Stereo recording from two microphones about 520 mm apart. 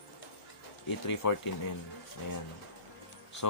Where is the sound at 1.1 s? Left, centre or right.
Left.